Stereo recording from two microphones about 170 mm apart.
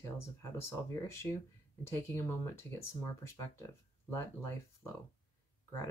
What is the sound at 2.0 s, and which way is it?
Speech, 15° left (ahead or behind).